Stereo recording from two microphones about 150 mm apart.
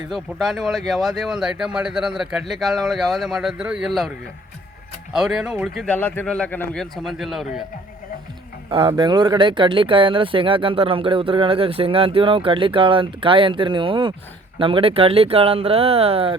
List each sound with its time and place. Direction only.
0.1 s speech: centre (ahead or behind)
5.1 s speech: 5° right (ahead or behind)
8.7 s speech: 35° right (ahead or behind)